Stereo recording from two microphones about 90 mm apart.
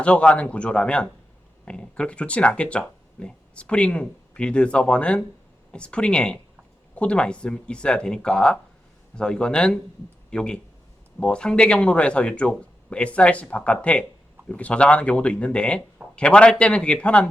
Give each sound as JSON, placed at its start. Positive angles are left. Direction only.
{"t": 0.0, "sound": "speech", "side_deg": 15}